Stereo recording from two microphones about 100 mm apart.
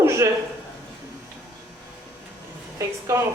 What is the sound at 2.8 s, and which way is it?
Speech, 35° right (ahead or behind).